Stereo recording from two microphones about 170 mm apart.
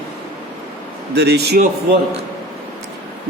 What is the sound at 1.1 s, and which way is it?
Speech, 75° right (ahead or behind).